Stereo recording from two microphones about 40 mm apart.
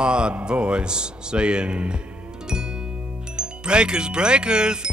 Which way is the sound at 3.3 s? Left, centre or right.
Right.